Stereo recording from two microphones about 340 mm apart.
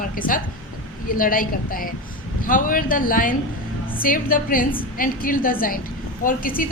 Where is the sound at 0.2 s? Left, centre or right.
Left.